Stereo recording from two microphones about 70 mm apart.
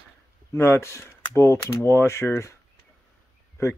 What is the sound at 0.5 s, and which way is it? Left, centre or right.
Speech, left.